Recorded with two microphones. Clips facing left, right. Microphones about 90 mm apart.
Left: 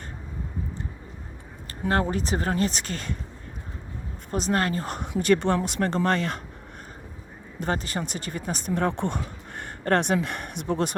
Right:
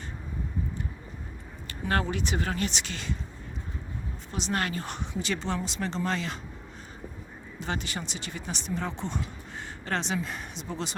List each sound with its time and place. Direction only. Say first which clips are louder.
1.9 s speech: left 4 dB; 35° left (ahead or behind)
4.3 s speech: left 6 dB; 40° left (ahead or behind)
5.1 s speech: left 10 dB; 55° left (ahead or behind)
7.6 s speech: left 6 dB; 40° left (ahead or behind)